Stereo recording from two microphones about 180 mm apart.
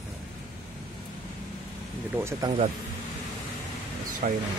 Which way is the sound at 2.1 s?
15° right (ahead or behind).